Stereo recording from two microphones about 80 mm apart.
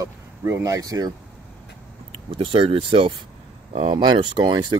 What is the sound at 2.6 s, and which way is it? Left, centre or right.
Speech, right.